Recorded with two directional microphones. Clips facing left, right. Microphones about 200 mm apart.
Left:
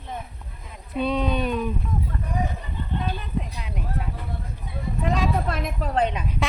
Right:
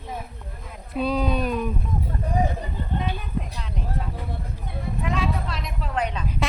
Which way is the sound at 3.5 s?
10° left (ahead or behind).